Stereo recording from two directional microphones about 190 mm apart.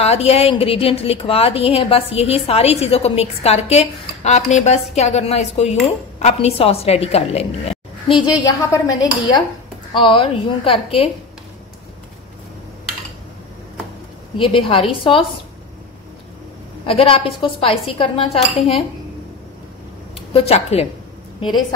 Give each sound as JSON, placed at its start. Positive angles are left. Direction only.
{"t": 0.0, "sound": "a woman's voice", "side_deg": 35}
{"t": 8.1, "sound": "speech", "side_deg": 20}
{"t": 14.3, "sound": "speech", "side_deg": 25}
{"t": 16.8, "sound": "speech", "side_deg": 30}
{"t": 20.2, "sound": "a woman's voice", "side_deg": 30}